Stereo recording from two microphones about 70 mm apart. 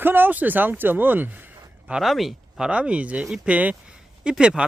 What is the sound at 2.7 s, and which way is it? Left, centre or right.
Speech, centre.